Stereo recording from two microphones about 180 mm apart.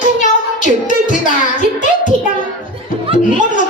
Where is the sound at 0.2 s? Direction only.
45° left (ahead or behind).